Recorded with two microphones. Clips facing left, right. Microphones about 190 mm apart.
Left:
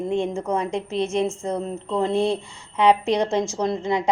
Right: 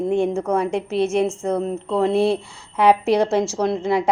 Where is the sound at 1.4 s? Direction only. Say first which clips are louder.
Right 4 dB; 60° right (ahead or behind).